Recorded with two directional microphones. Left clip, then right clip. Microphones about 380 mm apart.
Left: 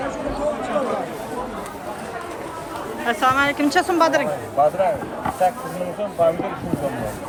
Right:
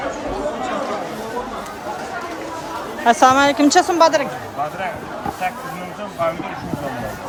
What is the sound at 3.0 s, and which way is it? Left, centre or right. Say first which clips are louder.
A woman's voice: right 6 dB; centre.